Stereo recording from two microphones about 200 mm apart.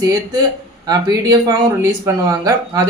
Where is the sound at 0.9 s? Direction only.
15° right (ahead or behind).